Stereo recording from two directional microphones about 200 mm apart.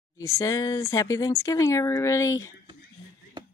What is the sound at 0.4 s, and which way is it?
Speech, 15° left (ahead or behind).